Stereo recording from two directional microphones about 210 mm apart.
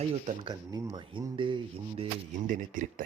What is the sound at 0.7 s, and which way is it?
Speech, 15° right (ahead or behind).